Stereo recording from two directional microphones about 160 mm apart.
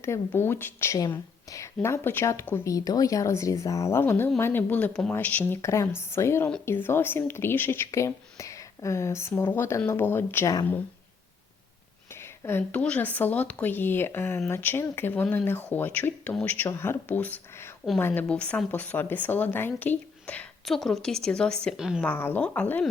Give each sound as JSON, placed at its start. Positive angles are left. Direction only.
{"t": 0.0, "sound": "speech", "side_deg": 15}
{"t": 12.4, "sound": "speech", "side_deg": 15}
{"t": 22.0, "sound": "speech", "side_deg": 10}